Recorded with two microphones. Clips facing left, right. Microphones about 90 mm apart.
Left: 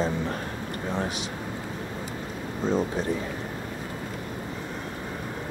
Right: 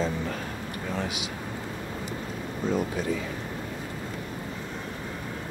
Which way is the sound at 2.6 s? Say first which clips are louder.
Left 2 dB; 30° left (ahead or behind).